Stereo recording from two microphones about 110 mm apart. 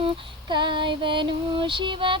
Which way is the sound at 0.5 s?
45° right (ahead or behind).